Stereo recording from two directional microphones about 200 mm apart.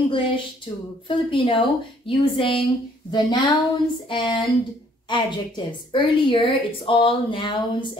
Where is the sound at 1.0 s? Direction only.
25° left (ahead or behind).